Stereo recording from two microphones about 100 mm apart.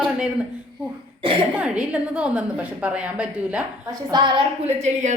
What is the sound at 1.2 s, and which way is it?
Speech, 60° right (ahead or behind).